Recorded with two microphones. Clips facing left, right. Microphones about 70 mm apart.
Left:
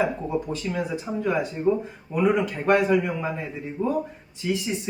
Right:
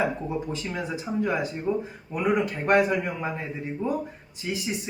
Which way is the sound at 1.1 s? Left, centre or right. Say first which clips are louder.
Right 1 dB; centre.